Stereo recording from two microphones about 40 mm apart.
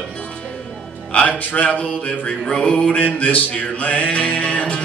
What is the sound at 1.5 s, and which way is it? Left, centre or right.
Music, left.